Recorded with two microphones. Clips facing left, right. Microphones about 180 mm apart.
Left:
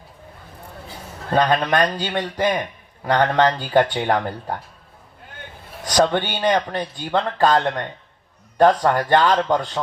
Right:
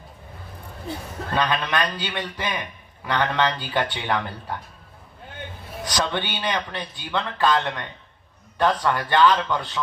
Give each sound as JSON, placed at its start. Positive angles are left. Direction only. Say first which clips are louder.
{"t": 1.3, "sound": "a man's voice", "louder": "left 6 dB", "side_deg": 45}
{"t": 5.8, "sound": "a man's voice", "louder": "left 8 dB", "side_deg": 45}